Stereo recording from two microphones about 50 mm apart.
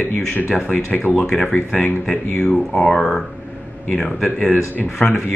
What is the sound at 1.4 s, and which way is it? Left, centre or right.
Speech, left.